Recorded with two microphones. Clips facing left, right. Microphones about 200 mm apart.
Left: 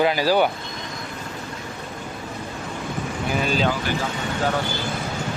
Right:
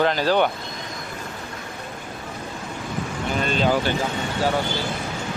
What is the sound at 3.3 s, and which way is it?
Speech, 5° left (ahead or behind).